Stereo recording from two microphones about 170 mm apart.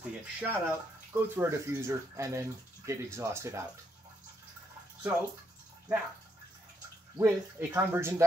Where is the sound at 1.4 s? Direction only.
15° right (ahead or behind).